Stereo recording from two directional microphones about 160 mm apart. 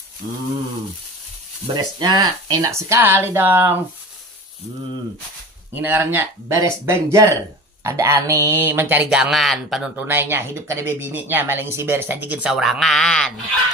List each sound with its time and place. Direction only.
1.7 s speech: 25° right (ahead or behind)
5.7 s speech: 15° right (ahead or behind); by 13.3 s 5° left (ahead or behind)